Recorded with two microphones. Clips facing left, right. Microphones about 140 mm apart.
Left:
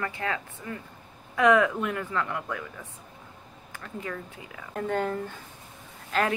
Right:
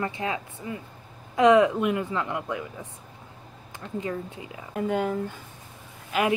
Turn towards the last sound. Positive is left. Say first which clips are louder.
# right 2 dB
turn(degrees=-10)  # may be behind; listen again after turning